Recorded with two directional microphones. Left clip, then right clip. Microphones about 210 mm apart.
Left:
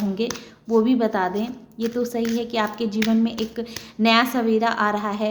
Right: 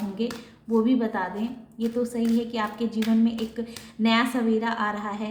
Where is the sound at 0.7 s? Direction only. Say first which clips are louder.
Left 5 dB; 45° left (ahead or behind).